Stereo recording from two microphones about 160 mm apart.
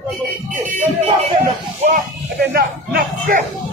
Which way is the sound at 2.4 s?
75° right (ahead or behind).